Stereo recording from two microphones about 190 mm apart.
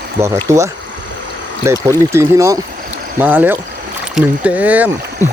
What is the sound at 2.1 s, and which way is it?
Speech, 15° right (ahead or behind).